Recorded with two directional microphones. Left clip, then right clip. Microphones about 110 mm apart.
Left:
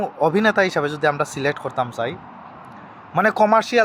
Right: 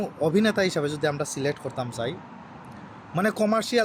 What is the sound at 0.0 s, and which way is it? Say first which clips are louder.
Speech: left 6 dB; 25° right (ahead or behind).